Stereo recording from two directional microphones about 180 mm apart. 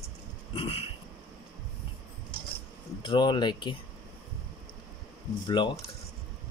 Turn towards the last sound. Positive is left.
turn(degrees=25)  # may be behind; listen again after turning